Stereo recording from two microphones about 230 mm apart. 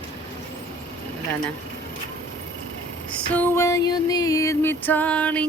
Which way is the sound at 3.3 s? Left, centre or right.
Centre.